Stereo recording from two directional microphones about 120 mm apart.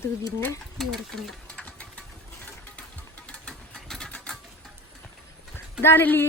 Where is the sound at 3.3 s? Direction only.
5° left (ahead or behind).